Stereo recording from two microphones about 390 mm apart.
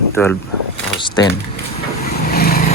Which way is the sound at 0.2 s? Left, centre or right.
Centre.